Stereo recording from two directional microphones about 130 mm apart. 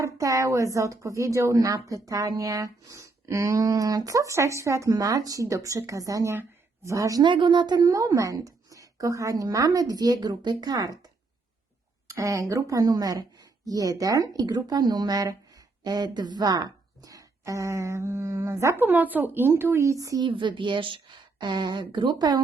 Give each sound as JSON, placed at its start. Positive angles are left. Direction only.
{"t": 0.0, "sound": "speech", "side_deg": -25}
{"t": 12.1, "sound": "speech", "side_deg": -25}
{"t": 20.2, "sound": "a woman's voice", "side_deg": -40}